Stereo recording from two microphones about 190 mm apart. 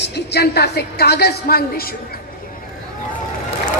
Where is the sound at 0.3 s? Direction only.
60° left (ahead or behind).